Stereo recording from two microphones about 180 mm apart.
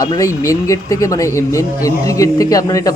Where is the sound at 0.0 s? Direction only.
20° left (ahead or behind).